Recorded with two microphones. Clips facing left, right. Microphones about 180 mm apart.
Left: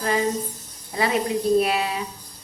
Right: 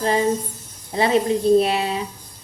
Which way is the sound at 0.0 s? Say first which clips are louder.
Right 3 dB; 30° right (ahead or behind).